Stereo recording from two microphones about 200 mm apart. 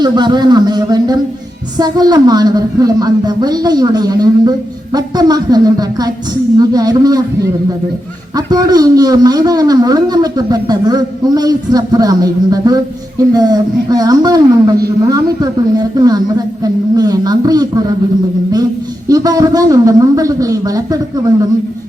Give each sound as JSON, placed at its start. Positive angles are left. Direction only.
{"t": 0.0, "sound": "a man's voice", "side_deg": -20}
{"t": 8.4, "sound": "a man's voice", "side_deg": -20}
{"t": 19.0, "sound": "a man's voice", "side_deg": -20}